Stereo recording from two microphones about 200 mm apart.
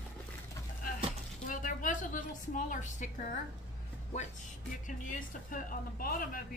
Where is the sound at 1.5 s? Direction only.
40° left (ahead or behind).